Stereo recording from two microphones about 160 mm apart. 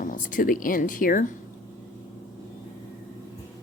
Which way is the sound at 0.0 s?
55° left (ahead or behind).